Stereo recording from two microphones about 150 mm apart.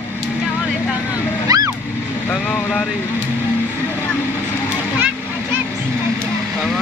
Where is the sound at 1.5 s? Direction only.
25° right (ahead or behind).